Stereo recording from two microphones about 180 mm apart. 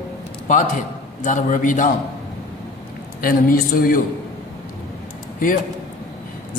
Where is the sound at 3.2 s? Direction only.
55° left (ahead or behind).